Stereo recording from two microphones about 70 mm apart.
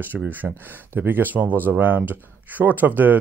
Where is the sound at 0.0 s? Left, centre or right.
Right.